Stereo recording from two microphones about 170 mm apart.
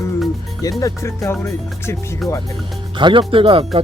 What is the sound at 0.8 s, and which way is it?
Speech, 15° left (ahead or behind).